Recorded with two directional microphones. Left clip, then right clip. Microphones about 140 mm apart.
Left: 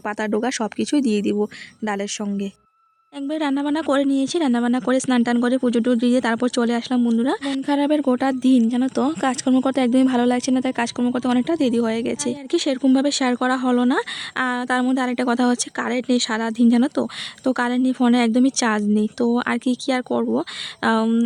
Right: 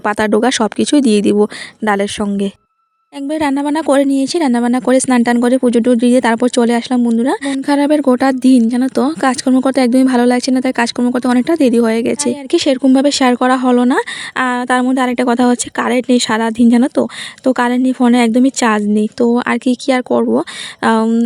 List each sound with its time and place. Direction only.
0.0 s speech: 50° right (ahead or behind)
3.2 s speech: 35° right (ahead or behind)